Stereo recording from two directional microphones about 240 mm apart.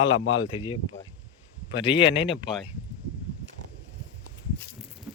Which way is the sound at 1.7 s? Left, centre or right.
Left.